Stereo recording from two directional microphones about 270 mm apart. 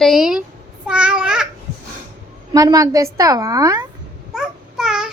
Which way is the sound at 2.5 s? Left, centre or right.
Centre.